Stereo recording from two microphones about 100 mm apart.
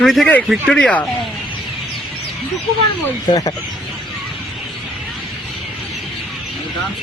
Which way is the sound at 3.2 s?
40° left (ahead or behind).